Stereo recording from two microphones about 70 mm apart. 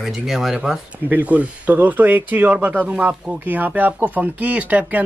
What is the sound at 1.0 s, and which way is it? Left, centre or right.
A man's voice, right.